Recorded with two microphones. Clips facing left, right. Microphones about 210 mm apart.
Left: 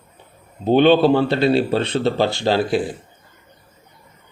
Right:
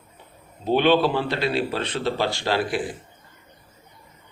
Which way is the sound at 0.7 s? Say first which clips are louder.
Left 6 dB; 25° left (ahead or behind).